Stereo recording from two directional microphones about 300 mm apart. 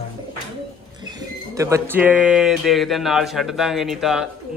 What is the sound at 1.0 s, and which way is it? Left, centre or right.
Speech, centre.